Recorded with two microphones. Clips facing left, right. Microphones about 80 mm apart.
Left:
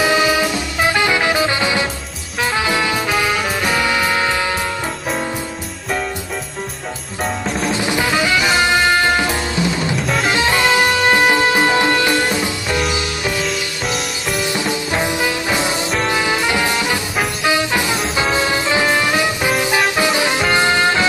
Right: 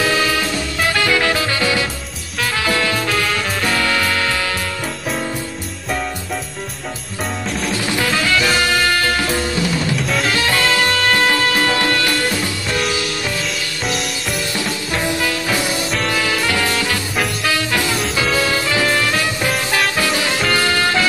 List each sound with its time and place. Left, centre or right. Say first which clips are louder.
0.0 s music: left 3 dB; centre
7.7 s music: left 1 dB; centre
10.0 s drum kit: left 1 dB; centre
10.3 s music: left 4 dB; centre
14.5 s music: left 3 dB; centre